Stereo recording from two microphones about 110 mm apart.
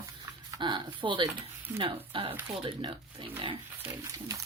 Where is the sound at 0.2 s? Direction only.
40° right (ahead or behind).